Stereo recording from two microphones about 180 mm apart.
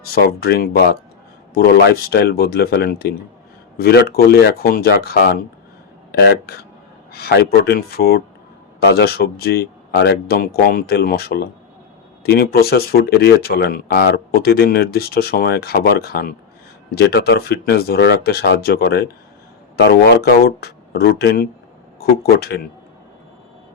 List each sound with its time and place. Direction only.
0.0 s speech: 55° left (ahead or behind)